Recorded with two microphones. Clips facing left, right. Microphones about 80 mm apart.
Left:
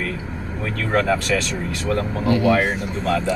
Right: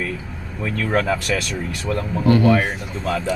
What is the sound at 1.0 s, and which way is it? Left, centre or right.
Speech, centre.